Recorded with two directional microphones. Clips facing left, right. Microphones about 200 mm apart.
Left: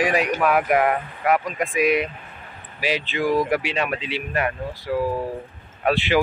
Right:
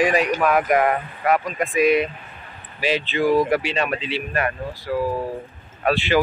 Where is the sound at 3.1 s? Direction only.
10° left (ahead or behind).